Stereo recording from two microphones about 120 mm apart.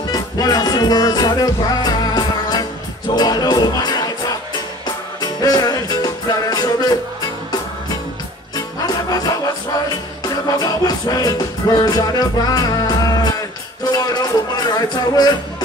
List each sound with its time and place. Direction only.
0.0 s music: 30° left (ahead or behind)
5.2 s music: 30° left (ahead or behind)
8.5 s music: 35° left (ahead or behind)